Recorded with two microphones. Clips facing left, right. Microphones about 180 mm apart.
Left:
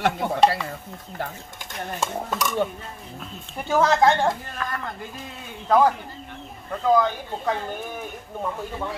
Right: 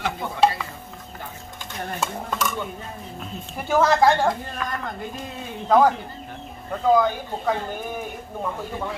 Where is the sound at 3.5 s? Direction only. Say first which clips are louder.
Right 1 dB; 5° right (ahead or behind).